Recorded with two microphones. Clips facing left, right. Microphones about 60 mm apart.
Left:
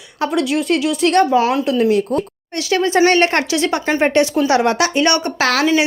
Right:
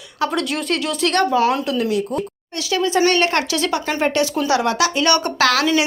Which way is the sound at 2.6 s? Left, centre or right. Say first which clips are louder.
Left 3 dB; left.